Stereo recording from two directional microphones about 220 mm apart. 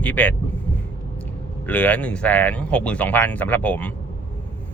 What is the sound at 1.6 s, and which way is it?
Speech, 5° left (ahead or behind).